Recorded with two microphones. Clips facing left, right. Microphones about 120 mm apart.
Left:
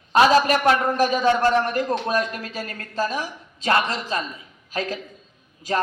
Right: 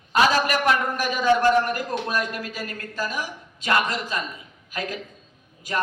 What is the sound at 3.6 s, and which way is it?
Speech, 30° left (ahead or behind).